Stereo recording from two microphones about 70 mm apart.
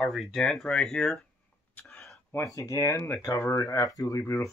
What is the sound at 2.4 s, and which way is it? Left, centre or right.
Speech, left.